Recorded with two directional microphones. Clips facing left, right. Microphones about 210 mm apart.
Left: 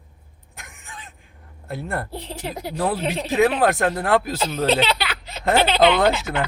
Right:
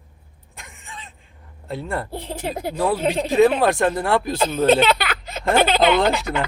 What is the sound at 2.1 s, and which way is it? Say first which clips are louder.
Speech: right 3 dB; 50° right (ahead or behind).